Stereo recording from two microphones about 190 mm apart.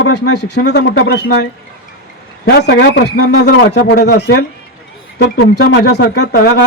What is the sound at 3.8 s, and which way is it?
Speech, 45° left (ahead or behind).